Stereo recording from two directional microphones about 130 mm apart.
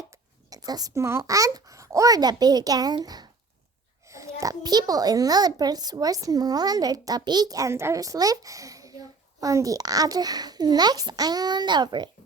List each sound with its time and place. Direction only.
0.1 s a child's voice: 30° right (ahead or behind)